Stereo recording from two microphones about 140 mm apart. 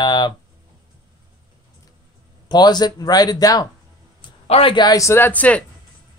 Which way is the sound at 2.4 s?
30° left (ahead or behind).